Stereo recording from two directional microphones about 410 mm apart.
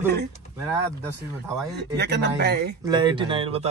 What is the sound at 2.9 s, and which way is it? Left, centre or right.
Speech, centre.